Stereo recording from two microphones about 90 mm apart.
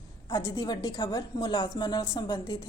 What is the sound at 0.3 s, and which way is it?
A woman's voice, 45° left (ahead or behind).